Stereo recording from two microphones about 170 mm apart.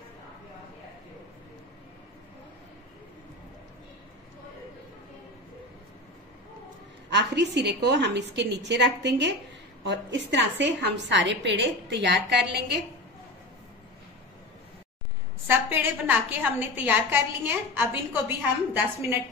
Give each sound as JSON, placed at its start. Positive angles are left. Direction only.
{"t": 7.1, "sound": "a woman's voice", "side_deg": -90}
{"t": 15.4, "sound": "a woman's voice", "side_deg": -10}